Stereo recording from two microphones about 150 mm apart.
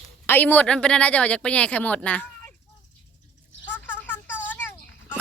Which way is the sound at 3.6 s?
10° left (ahead or behind).